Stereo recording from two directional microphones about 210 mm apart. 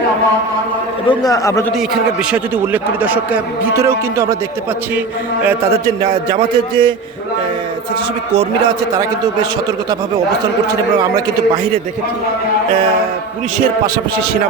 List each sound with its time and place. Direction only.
1.0 s a man's voice: 15° left (ahead or behind)
2.3 s a man's voice: 10° right (ahead or behind)
5.8 s a man's voice: 15° right (ahead or behind)